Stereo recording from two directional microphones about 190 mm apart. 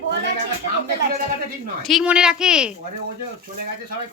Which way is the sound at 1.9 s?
5° right (ahead or behind).